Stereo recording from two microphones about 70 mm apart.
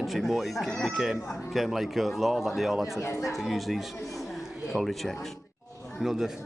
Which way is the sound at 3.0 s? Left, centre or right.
Left.